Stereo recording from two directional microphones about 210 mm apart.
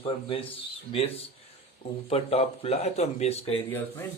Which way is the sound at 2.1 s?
30° left (ahead or behind).